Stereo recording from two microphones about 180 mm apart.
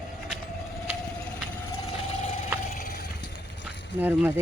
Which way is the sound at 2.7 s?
55° left (ahead or behind).